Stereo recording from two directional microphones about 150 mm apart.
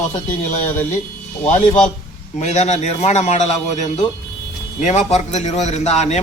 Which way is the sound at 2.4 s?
50° left (ahead or behind).